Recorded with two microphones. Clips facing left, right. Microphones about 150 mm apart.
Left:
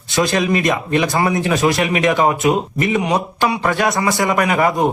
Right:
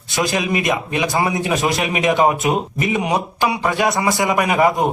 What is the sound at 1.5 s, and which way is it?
A man's voice, 20° right (ahead or behind).